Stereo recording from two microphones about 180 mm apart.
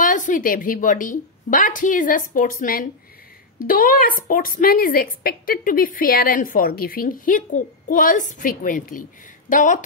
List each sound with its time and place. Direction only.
0.0 s a woman's voice: 45° left (ahead or behind)